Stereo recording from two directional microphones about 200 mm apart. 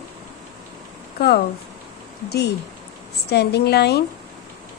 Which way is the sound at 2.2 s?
55° left (ahead or behind).